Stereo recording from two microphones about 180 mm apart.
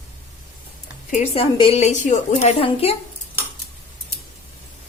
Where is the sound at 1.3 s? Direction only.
30° left (ahead or behind).